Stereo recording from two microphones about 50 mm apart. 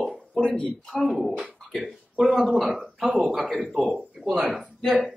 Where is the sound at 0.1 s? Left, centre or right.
Centre.